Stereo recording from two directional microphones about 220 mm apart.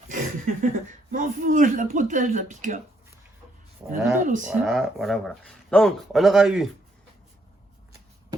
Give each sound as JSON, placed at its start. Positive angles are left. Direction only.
{"t": 0.1, "sound": "a sound", "side_deg": -35}
{"t": 1.1, "sound": "a man's voice", "side_deg": -35}
{"t": 4.2, "sound": "a man's voice", "side_deg": -35}
{"t": 4.6, "sound": "speech", "side_deg": 0}